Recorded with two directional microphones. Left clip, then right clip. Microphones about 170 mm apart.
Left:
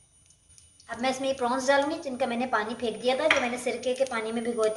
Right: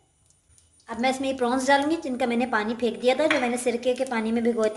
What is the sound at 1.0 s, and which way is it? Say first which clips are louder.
A woman's voice: right 3 dB; 60° right (ahead or behind).